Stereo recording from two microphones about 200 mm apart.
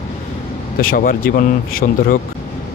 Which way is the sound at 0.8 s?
45° left (ahead or behind).